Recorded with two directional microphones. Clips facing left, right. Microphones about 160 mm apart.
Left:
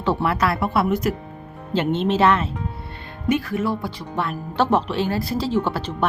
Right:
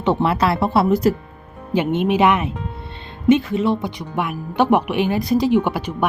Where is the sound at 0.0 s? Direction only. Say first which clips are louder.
Right 3 dB; 20° right (ahead or behind).